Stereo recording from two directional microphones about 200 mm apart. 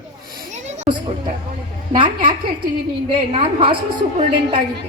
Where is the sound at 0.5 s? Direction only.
35° right (ahead or behind).